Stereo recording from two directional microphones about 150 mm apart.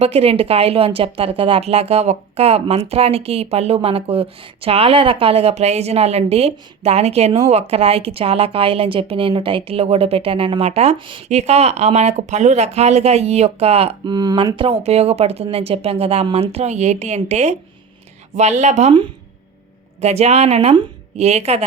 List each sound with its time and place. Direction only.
0.0 s speech: 40° right (ahead or behind)
20.0 s speech: 45° right (ahead or behind)